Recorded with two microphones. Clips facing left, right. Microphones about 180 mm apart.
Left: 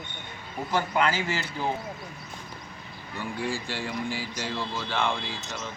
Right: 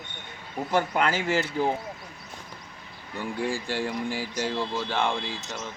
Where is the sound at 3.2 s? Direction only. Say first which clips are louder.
Right 2 dB; 50° right (ahead or behind).